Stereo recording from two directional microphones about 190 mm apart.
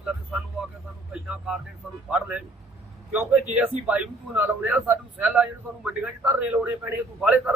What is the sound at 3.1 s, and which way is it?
A man's voice, 5° right (ahead or behind).